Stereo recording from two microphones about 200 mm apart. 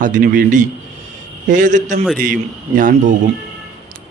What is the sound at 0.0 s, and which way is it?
Speech, 40° right (ahead or behind).